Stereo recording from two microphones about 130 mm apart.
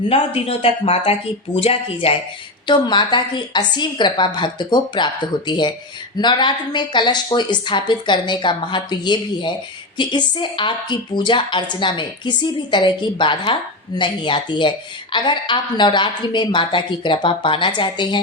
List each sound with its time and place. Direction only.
0.1 s speech: 45° left (ahead or behind)
2.6 s speech: 35° left (ahead or behind)